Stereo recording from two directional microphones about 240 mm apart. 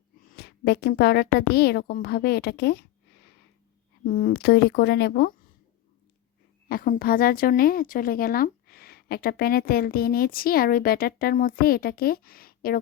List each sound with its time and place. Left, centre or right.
0.3 s a woman's voice: left
4.0 s a woman's voice: left
6.7 s a woman's voice: left